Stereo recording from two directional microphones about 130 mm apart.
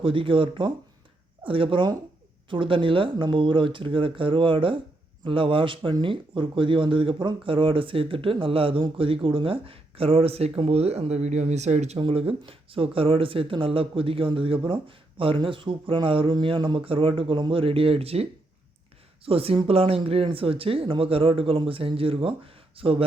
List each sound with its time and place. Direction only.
0.0 s speech: 40° right (ahead or behind); by 11.9 s 60° right (ahead or behind)
11.9 s speech: 45° right (ahead or behind)